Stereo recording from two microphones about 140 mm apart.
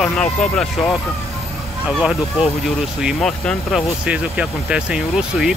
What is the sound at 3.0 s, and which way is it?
Speech, 5° left (ahead or behind).